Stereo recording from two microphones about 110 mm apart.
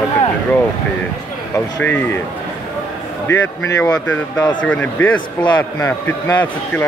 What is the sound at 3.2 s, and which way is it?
A man's voice, 20° left (ahead or behind).